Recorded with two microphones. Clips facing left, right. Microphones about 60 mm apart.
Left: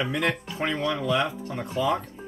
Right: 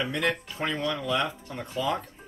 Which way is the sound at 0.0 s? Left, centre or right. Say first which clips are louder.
Left 2 dB; centre.